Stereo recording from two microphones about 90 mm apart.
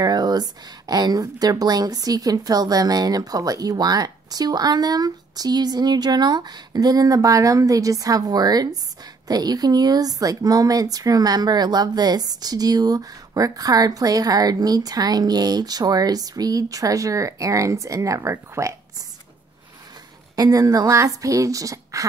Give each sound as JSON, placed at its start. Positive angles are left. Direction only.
{"t": 0.0, "sound": "a woman's voice", "side_deg": -50}
{"t": 20.3, "sound": "a woman's voice", "side_deg": -40}